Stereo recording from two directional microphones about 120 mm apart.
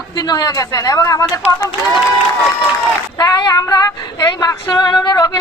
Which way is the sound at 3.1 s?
30° left (ahead or behind).